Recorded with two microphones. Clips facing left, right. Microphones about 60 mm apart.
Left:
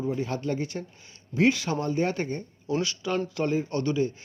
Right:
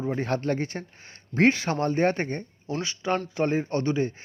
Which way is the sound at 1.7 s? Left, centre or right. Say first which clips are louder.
Right 3 dB; right.